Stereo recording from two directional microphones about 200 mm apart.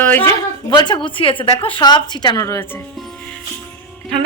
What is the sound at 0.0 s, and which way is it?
Speech, 10° left (ahead or behind).